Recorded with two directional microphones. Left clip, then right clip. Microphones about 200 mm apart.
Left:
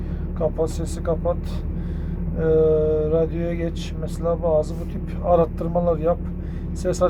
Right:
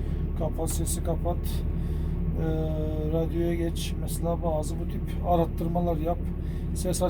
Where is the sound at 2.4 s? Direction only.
10° left (ahead or behind).